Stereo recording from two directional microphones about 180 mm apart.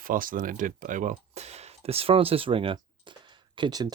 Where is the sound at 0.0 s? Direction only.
50° right (ahead or behind).